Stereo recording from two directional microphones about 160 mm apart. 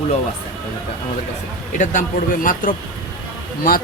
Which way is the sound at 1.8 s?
50° left (ahead or behind).